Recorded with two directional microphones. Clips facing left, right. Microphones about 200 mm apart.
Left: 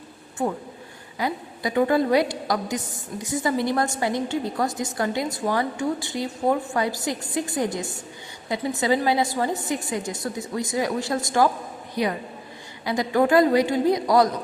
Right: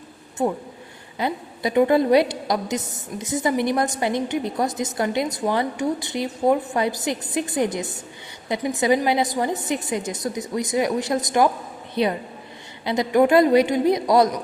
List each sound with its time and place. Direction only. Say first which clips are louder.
1.2 s a woman's voice: right 2 dB; 20° right (ahead or behind)